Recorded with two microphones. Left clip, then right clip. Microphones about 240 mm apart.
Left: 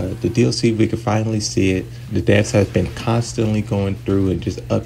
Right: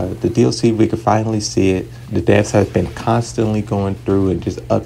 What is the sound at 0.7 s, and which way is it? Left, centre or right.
Speech, centre.